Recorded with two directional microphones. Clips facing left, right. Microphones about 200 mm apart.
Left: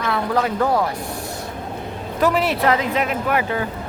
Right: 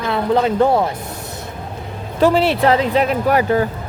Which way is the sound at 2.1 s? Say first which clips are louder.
Right 5 dB; 30° right (ahead or behind).